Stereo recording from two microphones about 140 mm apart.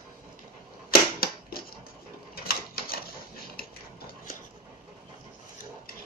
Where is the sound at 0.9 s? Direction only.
90° left.